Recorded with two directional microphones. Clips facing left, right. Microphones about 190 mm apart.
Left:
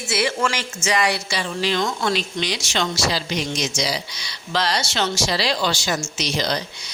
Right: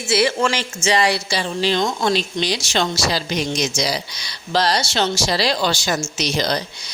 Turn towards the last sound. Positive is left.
turn(degrees=-40)  # may be behind; listen again after turning